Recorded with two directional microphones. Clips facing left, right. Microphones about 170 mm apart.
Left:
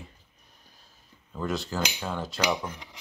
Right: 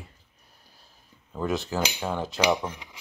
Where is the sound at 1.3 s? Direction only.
20° right (ahead or behind).